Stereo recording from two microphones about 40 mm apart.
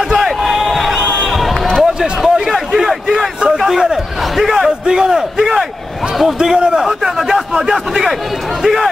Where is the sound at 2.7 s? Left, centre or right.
Centre.